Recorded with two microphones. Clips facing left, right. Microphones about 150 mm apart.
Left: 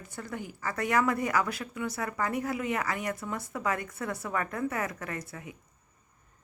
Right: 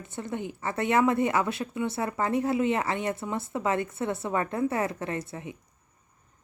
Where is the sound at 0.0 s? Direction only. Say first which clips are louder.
Right 5 dB; 25° right (ahead or behind).